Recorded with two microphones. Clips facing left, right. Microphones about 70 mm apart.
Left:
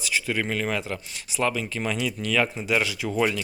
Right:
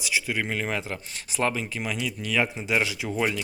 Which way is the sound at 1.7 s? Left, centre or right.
Centre.